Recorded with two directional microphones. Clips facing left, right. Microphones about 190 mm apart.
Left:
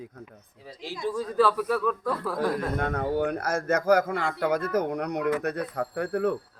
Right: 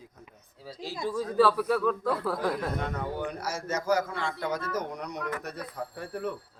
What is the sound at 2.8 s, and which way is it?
A man's voice, 60° left (ahead or behind).